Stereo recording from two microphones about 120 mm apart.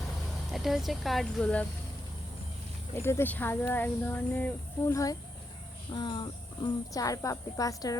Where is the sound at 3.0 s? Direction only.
20° left (ahead or behind).